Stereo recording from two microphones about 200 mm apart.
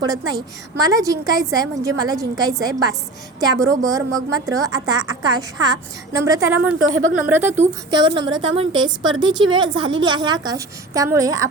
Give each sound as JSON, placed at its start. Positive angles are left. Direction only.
{"t": 0.1, "sound": "a woman's voice", "side_deg": -20}
{"t": 6.7, "sound": "speech", "side_deg": -85}
{"t": 7.1, "sound": "a woman's voice", "side_deg": -10}
{"t": 7.6, "sound": "a woman's voice", "side_deg": -20}